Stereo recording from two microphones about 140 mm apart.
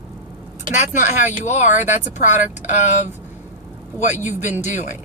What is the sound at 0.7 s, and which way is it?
Speech, 60° left (ahead or behind).